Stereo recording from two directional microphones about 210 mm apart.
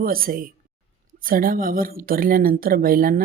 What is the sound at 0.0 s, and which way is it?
Speech, 45° right (ahead or behind).